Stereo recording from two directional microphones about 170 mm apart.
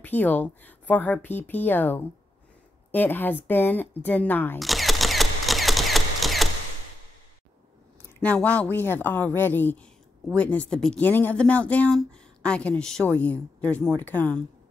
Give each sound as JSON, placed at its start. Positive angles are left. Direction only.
{"t": 0.0, "sound": "speech", "side_deg": 10}
{"t": 4.6, "sound": "camera", "side_deg": 0}
{"t": 8.2, "sound": "speech", "side_deg": 5}